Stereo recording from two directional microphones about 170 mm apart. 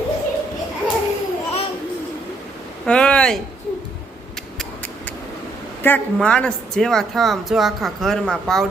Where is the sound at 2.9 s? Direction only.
5° left (ahead or behind).